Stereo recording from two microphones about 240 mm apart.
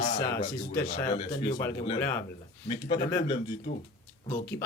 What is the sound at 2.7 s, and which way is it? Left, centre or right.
Speech, left.